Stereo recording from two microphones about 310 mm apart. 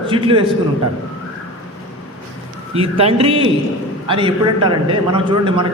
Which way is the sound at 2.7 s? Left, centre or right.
Centre.